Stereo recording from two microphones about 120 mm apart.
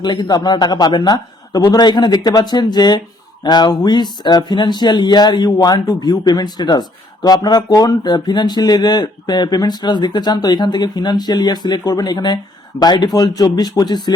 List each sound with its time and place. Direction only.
0.0 s speech: 40° left (ahead or behind)